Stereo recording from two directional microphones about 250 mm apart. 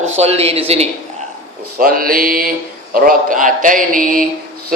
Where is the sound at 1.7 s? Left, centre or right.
Right.